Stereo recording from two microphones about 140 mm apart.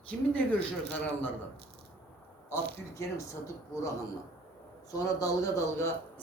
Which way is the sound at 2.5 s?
20° left (ahead or behind).